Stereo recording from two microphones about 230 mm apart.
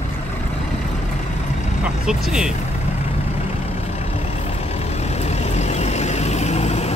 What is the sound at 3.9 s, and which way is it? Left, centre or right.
Vehicle, left.